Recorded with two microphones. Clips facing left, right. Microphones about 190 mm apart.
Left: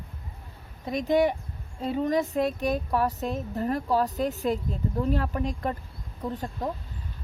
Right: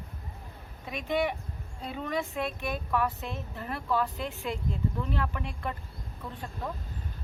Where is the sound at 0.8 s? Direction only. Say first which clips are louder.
Left 7 dB; 40° left (ahead or behind).